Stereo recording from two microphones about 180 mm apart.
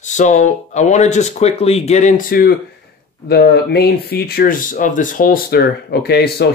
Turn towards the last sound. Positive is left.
turn(degrees=65)  # may be behind; listen again after turning